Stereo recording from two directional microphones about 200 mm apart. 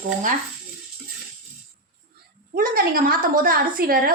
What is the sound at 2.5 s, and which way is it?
A woman's voice, 45° right (ahead or behind).